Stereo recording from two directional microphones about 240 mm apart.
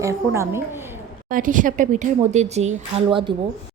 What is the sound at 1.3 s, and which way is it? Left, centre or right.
A woman's voice, right.